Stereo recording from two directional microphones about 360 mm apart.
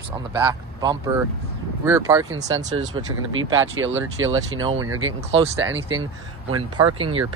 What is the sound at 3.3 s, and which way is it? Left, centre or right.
Speech, right.